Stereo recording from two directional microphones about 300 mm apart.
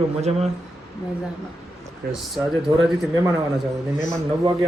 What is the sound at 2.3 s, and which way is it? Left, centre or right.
A man's voice, centre.